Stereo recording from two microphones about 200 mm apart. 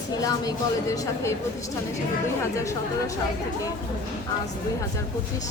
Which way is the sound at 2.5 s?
15° left (ahead or behind).